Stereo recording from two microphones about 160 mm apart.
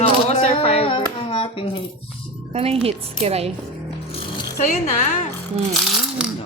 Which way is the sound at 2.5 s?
35° right (ahead or behind).